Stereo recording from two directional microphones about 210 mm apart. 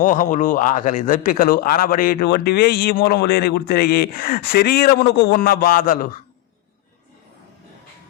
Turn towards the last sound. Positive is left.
turn(degrees=40)  # may be behind; listen again after turning